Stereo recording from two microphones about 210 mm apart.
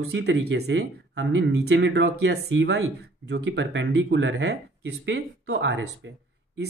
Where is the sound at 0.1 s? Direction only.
55° right (ahead or behind).